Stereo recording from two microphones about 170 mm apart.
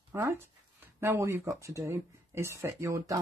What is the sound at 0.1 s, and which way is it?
Speech, 15° right (ahead or behind).